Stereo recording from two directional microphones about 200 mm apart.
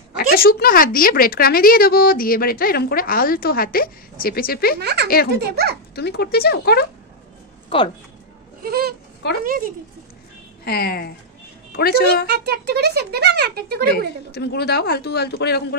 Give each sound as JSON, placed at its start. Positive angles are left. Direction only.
{"t": 0.1, "sound": "a woman's voice", "side_deg": 50}
{"t": 4.7, "sound": "speech", "side_deg": -55}
{"t": 5.9, "sound": "a woman's voice", "side_deg": 55}
{"t": 7.7, "sound": "speech", "side_deg": 25}
{"t": 8.6, "sound": "speech", "side_deg": -50}
{"t": 10.6, "sound": "a woman's voice", "side_deg": 50}
{"t": 12.3, "sound": "speech", "side_deg": -55}
{"t": 13.9, "sound": "a woman's voice", "side_deg": 55}